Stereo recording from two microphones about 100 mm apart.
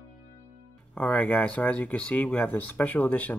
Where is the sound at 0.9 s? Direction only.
15° left (ahead or behind).